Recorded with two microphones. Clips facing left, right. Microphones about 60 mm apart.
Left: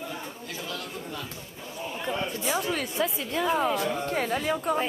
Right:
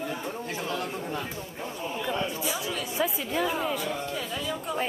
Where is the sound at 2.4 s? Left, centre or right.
Left.